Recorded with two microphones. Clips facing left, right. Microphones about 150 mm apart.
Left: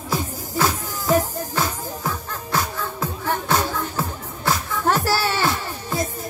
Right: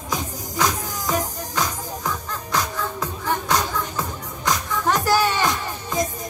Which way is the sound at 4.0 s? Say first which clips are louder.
Left 1 dB; 5° left (ahead or behind).